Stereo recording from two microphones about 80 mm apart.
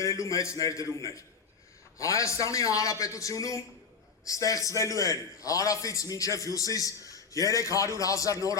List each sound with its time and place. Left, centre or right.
0.0 s a man's voice: left